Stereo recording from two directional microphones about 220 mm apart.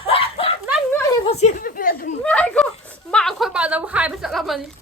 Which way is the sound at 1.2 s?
30° left (ahead or behind).